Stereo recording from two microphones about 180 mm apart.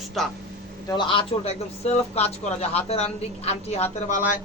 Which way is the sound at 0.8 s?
25° left (ahead or behind).